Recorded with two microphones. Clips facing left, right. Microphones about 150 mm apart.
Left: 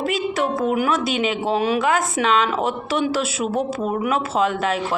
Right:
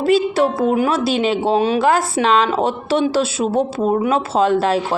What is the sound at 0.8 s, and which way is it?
Speech, 30° right (ahead or behind).